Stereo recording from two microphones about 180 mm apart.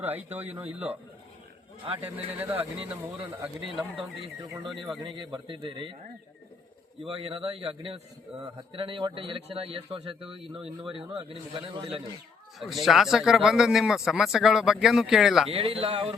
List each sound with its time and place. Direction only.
0.0 s speech: 10° right (ahead or behind)
2.0 s speech: 10° right (ahead or behind)
5.0 s speech: 25° right (ahead or behind)
7.0 s a man's voice: 30° right (ahead or behind)
12.5 s speech: centre (ahead or behind)
15.4 s a man's voice: 35° right (ahead or behind)